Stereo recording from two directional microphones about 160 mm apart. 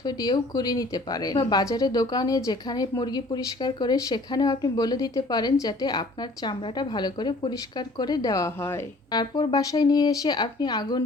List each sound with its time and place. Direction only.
0.0 s speech: 25° left (ahead or behind)